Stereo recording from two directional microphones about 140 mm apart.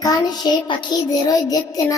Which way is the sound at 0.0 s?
30° left (ahead or behind).